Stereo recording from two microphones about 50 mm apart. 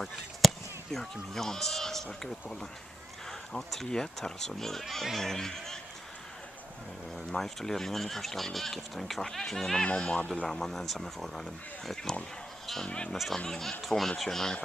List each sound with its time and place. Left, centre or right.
0.0 s chop: centre
0.9 s speech: centre
3.3 s speech: centre
7.2 s speech: centre
9.8 s speech: left
10.5 s speech: centre
12.8 s speech: centre
13.5 s speech: centre